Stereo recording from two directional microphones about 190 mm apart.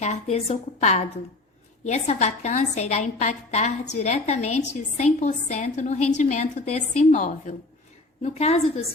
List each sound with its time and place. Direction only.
0.0 s a woman's voice: 35° left (ahead or behind)